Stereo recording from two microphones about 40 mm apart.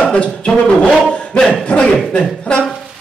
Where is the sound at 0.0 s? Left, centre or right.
Left.